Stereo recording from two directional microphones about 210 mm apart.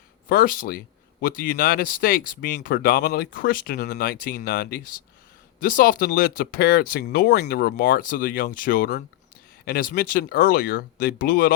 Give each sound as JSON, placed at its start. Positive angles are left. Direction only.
{"t": 0.3, "sound": "speech", "side_deg": 45}